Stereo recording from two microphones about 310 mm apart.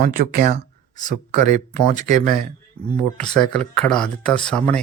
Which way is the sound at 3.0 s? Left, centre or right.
Centre.